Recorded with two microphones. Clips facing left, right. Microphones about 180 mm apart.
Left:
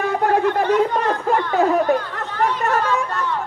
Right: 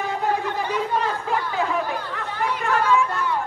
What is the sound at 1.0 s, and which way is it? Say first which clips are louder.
Chatter: left 5 dB; 50° left (ahead or behind).